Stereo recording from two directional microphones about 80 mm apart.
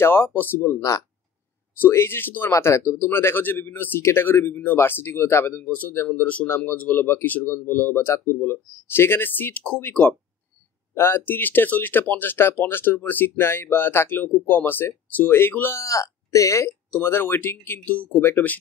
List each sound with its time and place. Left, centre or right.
0.0 s speech: left
1.8 s speech: left
6.4 s speech: left
15.8 s speech: left
17.0 s speech: left
17.7 s speech: centre